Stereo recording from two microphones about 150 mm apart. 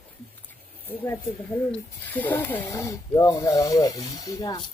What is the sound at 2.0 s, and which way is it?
Speech, 10° left (ahead or behind).